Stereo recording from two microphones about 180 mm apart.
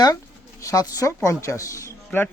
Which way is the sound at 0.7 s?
20° left (ahead or behind).